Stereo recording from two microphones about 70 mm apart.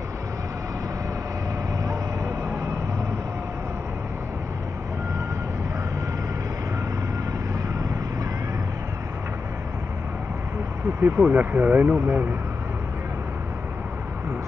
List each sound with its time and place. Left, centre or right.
11.0 s speech: right